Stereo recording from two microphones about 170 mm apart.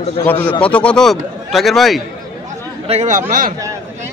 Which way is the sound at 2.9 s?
45° right (ahead or behind).